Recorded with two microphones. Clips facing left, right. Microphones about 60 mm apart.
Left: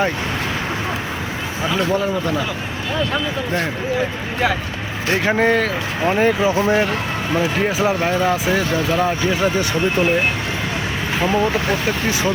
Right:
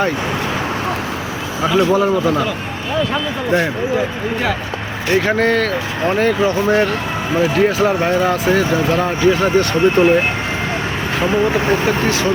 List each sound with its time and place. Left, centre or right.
1.9 s speech: centre
5.1 s speech: centre
11.4 s speech: right